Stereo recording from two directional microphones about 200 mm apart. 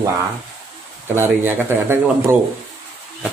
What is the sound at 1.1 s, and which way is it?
A man's voice, 10° right (ahead or behind).